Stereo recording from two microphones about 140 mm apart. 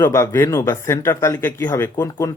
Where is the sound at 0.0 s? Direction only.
20° left (ahead or behind).